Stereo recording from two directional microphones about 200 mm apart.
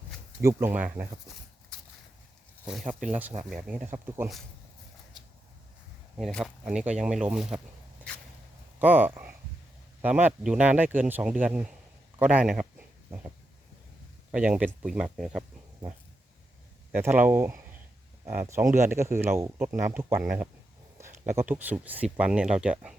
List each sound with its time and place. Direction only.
0.4 s speech: 10° right (ahead or behind)
2.6 s speech: 5° right (ahead or behind)
6.1 s speech: centre (ahead or behind)
8.8 s speech: 10° right (ahead or behind)
13.1 s a sound: 15° right (ahead or behind)
14.3 s speech: 5° right (ahead or behind)
16.9 s speech: 10° right (ahead or behind)